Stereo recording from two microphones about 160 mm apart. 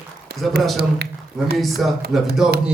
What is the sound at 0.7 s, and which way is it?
Speech, 85° right.